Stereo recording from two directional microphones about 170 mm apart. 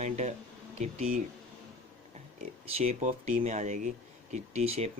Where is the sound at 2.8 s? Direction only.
45° right (ahead or behind).